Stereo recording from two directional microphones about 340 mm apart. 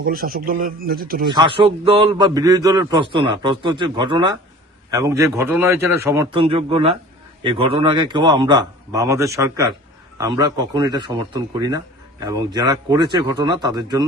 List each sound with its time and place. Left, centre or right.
0.0 s speech: right
1.3 s a man's voice: centre